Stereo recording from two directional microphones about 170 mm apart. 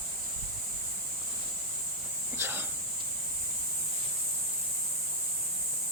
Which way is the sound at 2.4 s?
10° right (ahead or behind).